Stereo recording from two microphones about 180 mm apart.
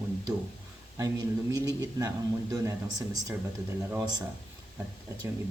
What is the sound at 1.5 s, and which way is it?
Speech, 20° right (ahead or behind).